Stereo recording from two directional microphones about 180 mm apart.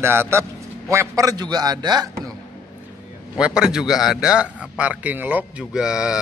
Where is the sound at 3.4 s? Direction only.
5° right (ahead or behind).